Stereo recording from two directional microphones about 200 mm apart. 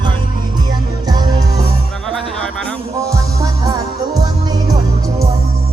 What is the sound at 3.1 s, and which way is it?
Music, 20° right (ahead or behind).